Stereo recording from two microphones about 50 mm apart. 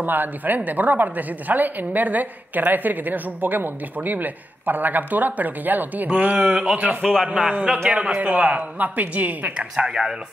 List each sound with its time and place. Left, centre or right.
0.0 s a woman's voice: right
6.8 s a man's voice: centre; by 9.7 s right
9.8 s a man's voice: centre